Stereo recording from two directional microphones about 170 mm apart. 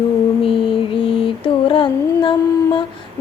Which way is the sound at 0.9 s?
30° left (ahead or behind).